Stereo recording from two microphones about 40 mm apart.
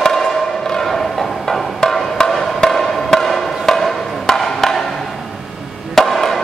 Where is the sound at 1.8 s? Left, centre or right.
Centre.